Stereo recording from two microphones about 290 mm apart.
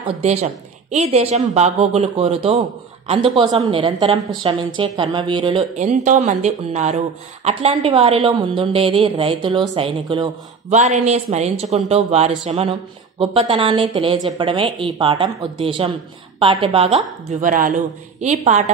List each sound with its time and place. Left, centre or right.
0.0 s a woman's voice: right